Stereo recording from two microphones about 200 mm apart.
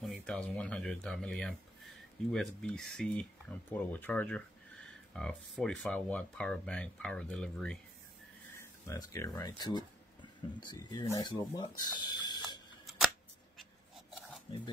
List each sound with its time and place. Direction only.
0.0 s speech: centre (ahead or behind)
8.5 s speech: 15° left (ahead or behind)
14.5 s speech: 25° left (ahead or behind)